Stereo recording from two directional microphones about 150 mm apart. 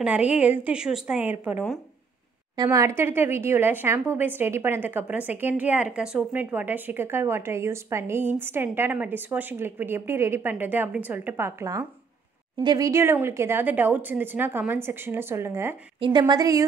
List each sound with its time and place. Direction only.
0.0 s a woman's voice: 5° right (ahead or behind)
2.5 s a woman's voice: 25° right (ahead or behind)
16.0 s a woman's voice: 30° right (ahead or behind)